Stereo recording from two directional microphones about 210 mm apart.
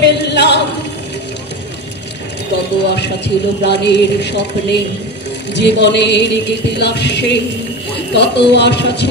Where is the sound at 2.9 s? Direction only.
55° left (ahead or behind).